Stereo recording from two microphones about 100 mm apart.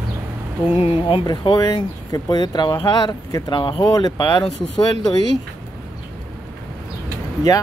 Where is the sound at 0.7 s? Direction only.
80° left.